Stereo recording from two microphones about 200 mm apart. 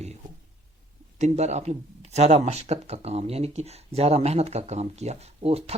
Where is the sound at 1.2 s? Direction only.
35° right (ahead or behind).